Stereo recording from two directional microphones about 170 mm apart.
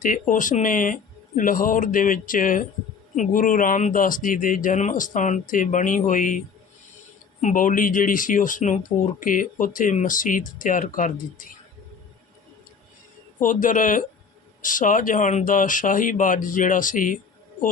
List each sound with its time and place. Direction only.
0.0 s speech: 50° left (ahead or behind)
7.4 s speech: 50° left (ahead or behind)
13.4 s speech: 50° left (ahead or behind)